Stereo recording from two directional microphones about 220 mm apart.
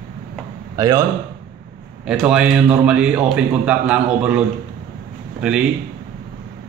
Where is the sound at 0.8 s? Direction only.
15° right (ahead or behind).